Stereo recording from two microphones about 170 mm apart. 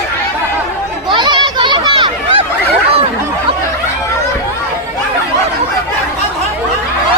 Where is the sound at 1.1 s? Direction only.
25° right (ahead or behind).